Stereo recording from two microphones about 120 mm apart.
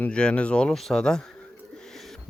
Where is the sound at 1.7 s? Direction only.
5° left (ahead or behind).